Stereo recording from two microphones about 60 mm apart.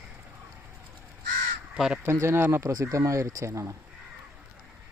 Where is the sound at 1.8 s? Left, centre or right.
Centre.